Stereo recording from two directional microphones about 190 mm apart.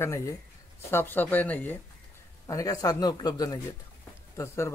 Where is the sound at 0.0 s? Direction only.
15° left (ahead or behind).